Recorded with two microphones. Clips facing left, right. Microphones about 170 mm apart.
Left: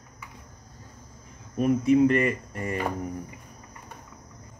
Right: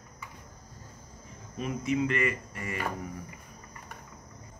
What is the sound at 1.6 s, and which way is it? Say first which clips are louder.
Speech: left 10 dB; 45° left (ahead or behind).